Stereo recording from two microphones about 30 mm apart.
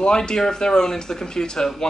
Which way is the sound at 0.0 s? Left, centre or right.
Left.